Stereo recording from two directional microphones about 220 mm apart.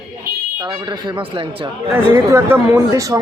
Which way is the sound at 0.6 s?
20° right (ahead or behind).